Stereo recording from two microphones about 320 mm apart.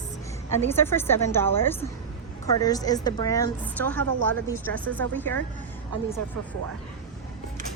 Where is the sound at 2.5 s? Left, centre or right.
Centre.